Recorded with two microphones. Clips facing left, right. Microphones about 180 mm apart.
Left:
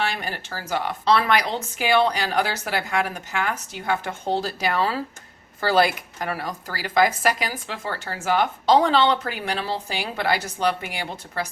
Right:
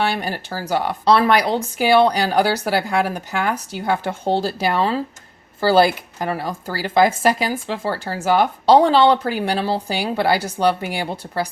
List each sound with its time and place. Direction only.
0.1 s speech: 35° right (ahead or behind)